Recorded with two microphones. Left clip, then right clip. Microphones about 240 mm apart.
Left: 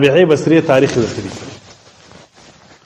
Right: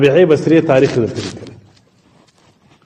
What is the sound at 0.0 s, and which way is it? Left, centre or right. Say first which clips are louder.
Speech: even; left.